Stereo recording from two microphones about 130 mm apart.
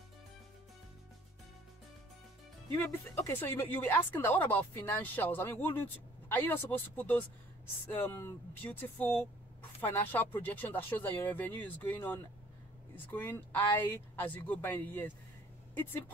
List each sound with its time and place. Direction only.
2.7 s speech: 20° left (ahead or behind)